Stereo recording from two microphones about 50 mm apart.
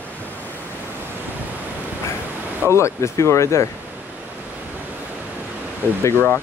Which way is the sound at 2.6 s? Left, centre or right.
Left.